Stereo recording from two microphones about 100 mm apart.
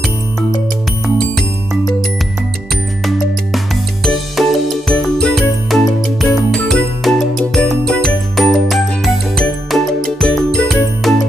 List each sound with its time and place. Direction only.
1.0 s music: centre (ahead or behind)
3.1 s music: centre (ahead or behind)